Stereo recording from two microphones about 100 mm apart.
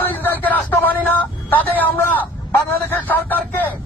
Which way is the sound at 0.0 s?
20° left (ahead or behind).